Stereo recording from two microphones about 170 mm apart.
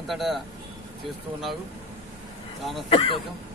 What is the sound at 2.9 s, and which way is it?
Speech, 35° left (ahead or behind).